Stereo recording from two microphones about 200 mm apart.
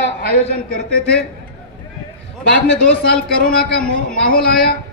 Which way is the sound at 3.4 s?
45° left (ahead or behind).